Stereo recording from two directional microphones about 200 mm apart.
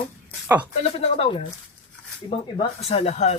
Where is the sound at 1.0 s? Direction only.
30° left (ahead or behind).